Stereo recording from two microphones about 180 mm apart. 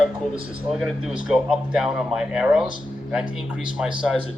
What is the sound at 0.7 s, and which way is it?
Speech, centre (ahead or behind).